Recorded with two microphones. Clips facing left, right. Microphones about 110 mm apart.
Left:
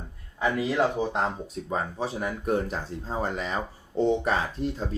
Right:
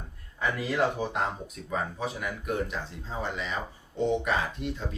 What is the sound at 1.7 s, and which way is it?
Speech, 35° left (ahead or behind).